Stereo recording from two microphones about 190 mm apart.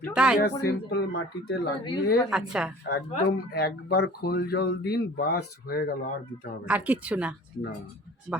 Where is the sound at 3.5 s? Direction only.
60° left (ahead or behind).